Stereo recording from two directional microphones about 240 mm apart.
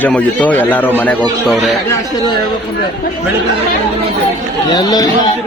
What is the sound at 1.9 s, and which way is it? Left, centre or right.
Speech, centre.